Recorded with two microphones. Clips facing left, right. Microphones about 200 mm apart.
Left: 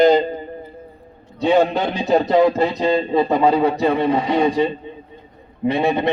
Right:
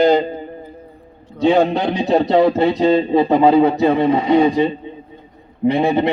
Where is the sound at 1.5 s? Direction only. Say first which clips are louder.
Right 2 dB; 15° right (ahead or behind).